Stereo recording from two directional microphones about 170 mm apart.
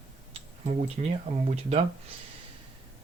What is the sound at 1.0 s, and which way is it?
Speech, 45° right (ahead or behind).